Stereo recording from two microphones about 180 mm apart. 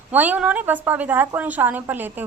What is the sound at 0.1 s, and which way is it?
A woman's voice, 10° right (ahead or behind).